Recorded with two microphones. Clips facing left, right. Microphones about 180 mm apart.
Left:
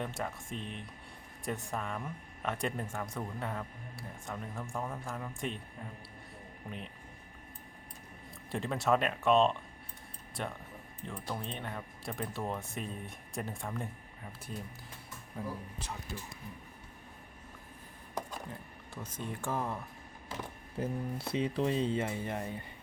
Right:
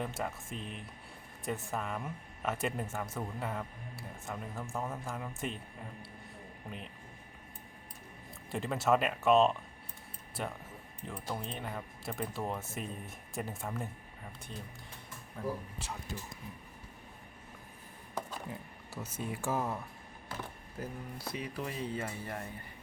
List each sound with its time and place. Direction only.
0.0 s speech: centre (ahead or behind)
6.7 s speech: centre (ahead or behind)
8.4 s speech: centre (ahead or behind)
14.5 s speech: 10° left (ahead or behind)
19.0 s speech: 5° right (ahead or behind)
20.7 s speech: 25° left (ahead or behind)